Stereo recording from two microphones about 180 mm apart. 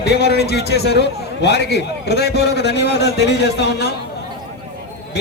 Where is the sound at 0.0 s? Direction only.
65° left (ahead or behind).